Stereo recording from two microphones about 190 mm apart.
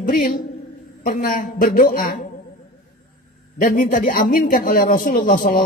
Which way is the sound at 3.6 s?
45° left (ahead or behind).